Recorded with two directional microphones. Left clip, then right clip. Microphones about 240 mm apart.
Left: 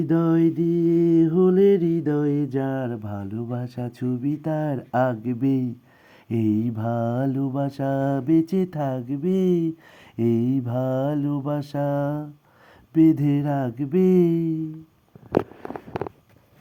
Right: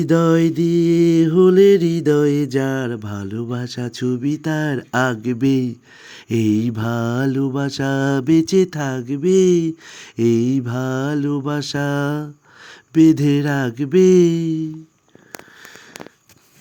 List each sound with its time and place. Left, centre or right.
0.0 s mantra: right
2.8 s mantra: centre